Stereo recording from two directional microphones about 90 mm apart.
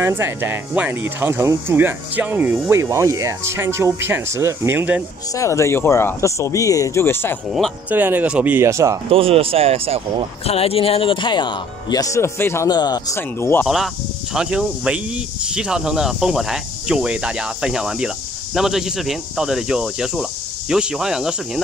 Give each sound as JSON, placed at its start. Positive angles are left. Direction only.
{"t": 0.0, "sound": "speech", "side_deg": -25}
{"t": 1.8, "sound": "speech", "side_deg": -20}
{"t": 2.7, "sound": "speech", "side_deg": -30}
{"t": 5.3, "sound": "speech", "side_deg": 35}
{"t": 7.9, "sound": "speech", "side_deg": -20}
{"t": 8.5, "sound": "speech", "side_deg": -30}
{"t": 9.1, "sound": "speech", "side_deg": -90}
{"t": 10.4, "sound": "speech", "side_deg": 90}
{"t": 12.0, "sound": "speech", "side_deg": 35}
{"t": 12.6, "sound": "speech", "side_deg": 50}
{"t": 13.1, "sound": "speech", "side_deg": 25}
{"t": 14.3, "sound": "speech", "side_deg": -10}